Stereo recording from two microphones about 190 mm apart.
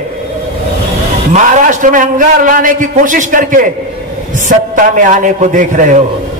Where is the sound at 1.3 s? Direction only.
40° right (ahead or behind).